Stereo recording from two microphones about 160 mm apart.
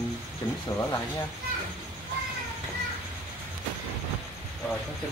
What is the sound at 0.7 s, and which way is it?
Speech, 20° left (ahead or behind).